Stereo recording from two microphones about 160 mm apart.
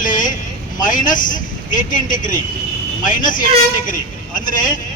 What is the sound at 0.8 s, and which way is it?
A man's voice, 55° left (ahead or behind).